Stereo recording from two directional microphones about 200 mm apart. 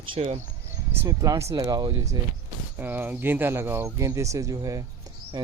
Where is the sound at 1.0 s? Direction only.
15° right (ahead or behind).